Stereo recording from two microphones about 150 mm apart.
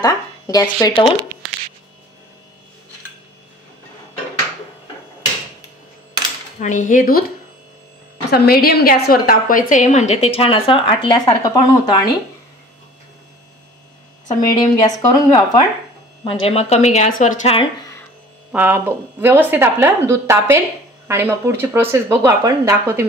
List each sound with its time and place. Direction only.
0.0 s speech: 25° left (ahead or behind)
6.6 s a woman's voice: 55° left (ahead or behind); by 12.1 s 25° left (ahead or behind)
14.2 s a woman's voice: 25° left (ahead or behind)
16.3 s a woman's voice: 40° left (ahead or behind)
18.5 s speech: 10° right (ahead or behind)